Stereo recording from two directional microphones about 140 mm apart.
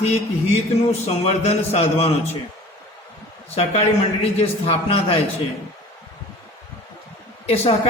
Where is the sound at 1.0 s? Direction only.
50° left (ahead or behind).